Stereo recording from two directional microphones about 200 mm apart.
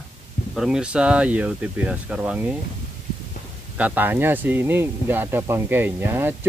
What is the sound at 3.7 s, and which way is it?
Speech, 10° right (ahead or behind).